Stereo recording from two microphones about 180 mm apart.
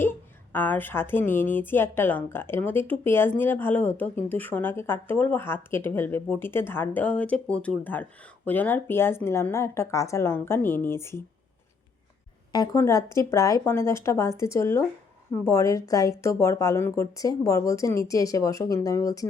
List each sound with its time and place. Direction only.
0.5 s a woman's voice: 10° left (ahead or behind)
12.5 s a woman's voice: 20° left (ahead or behind)